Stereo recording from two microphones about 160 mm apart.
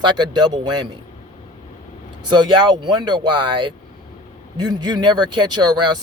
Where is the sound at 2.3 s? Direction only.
30° right (ahead or behind).